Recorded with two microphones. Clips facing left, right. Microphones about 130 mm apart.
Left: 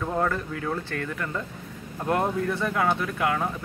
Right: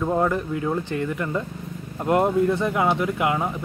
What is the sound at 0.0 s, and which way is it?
Speech, 15° right (ahead or behind).